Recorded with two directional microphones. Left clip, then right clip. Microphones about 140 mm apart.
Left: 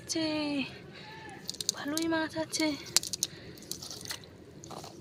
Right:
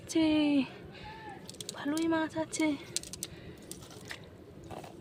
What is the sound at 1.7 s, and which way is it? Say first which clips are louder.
A woman's voice: right 2 dB; 25° right (ahead or behind).